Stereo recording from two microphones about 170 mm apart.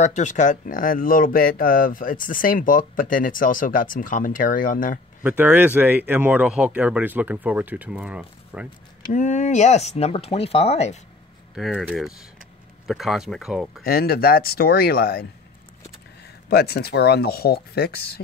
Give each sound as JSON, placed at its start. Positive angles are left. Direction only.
{"t": 0.0, "sound": "speech", "side_deg": 45}
{"t": 5.2, "sound": "speech", "side_deg": -10}
{"t": 9.1, "sound": "speech", "side_deg": 45}
{"t": 11.5, "sound": "speech", "side_deg": -5}
{"t": 13.8, "sound": "speech", "side_deg": 65}
{"t": 16.4, "sound": "speech", "side_deg": 70}